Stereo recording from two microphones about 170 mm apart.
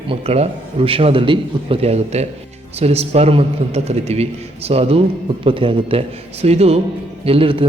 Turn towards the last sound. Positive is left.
turn(degrees=-30)  # may be behind; listen again after turning